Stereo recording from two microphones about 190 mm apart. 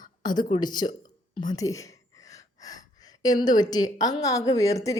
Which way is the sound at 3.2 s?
20° left (ahead or behind).